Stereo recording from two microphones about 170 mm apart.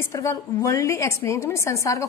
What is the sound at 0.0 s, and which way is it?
A woman's voice, 15° left (ahead or behind).